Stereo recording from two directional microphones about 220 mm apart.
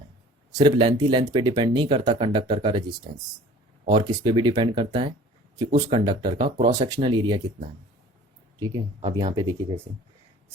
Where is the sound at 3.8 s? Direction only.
20° right (ahead or behind).